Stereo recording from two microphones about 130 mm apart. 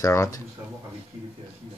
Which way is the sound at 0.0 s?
25° left (ahead or behind).